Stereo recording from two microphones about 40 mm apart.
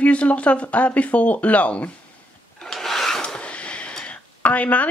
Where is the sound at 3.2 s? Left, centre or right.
Left.